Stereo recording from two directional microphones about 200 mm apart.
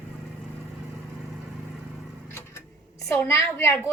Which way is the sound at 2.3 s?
15° left (ahead or behind).